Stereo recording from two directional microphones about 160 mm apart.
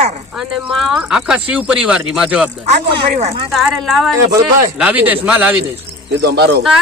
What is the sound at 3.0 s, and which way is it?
Speech, 45° right (ahead or behind).